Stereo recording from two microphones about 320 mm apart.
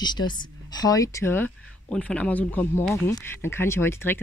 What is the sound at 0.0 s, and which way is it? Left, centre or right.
Speech, centre.